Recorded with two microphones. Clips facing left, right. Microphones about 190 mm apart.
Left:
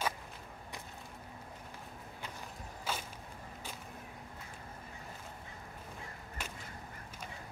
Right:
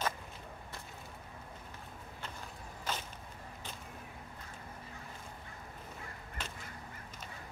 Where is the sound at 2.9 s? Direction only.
10° left (ahead or behind).